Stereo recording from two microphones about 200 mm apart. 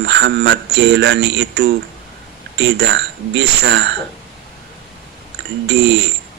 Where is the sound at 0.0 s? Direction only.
55° right (ahead or behind).